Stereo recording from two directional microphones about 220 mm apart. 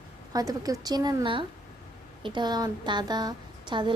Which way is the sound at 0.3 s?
15° right (ahead or behind).